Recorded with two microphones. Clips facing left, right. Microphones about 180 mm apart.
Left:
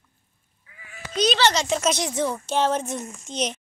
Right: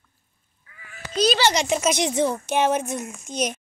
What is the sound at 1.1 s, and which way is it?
A child's voice, 5° right (ahead or behind).